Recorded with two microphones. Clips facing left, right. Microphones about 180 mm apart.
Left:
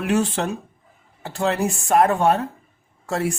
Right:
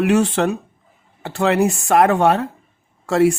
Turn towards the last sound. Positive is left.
turn(degrees=-80)